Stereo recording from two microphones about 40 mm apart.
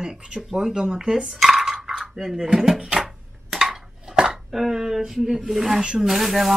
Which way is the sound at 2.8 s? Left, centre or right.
Centre.